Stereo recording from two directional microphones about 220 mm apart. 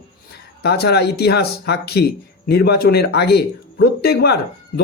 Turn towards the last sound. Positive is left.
turn(degrees=45)  # may be behind; listen again after turning